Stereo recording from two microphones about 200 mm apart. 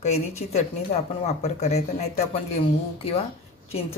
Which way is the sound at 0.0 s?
30° left (ahead or behind).